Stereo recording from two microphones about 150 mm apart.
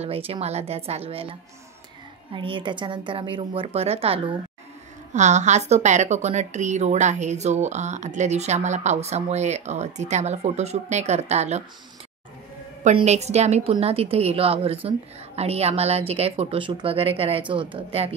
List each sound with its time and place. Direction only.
0.0 s a woman's voice: 40° right (ahead or behind)
2.3 s a woman's voice: 35° right (ahead or behind)
5.1 s a woman's voice: 50° right (ahead or behind)
12.9 s a woman's voice: 50° right (ahead or behind)